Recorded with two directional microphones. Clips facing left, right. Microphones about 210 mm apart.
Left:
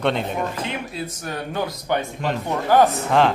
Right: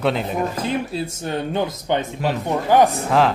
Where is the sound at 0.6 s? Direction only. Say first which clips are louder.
Right 5 dB; 35° right (ahead or behind).